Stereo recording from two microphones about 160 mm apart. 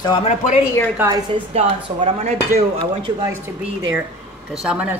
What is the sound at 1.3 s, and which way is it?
Speech, 40° right (ahead or behind).